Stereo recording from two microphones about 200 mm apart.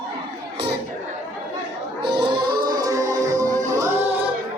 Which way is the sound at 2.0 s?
25° right (ahead or behind).